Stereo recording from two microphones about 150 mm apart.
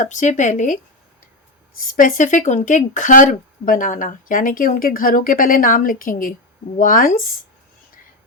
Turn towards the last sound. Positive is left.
turn(degrees=70)  # may be behind; listen again after turning